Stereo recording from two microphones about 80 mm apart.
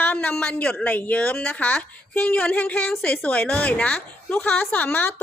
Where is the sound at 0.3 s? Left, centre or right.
Centre.